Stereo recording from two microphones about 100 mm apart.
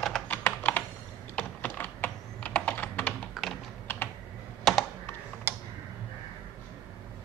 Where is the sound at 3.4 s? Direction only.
Centre (ahead or behind).